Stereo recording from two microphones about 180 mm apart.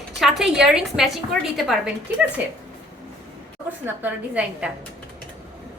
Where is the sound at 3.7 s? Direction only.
10° right (ahead or behind).